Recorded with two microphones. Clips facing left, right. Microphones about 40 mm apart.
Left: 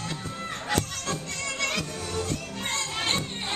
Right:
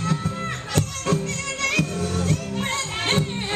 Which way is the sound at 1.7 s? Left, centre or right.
Right.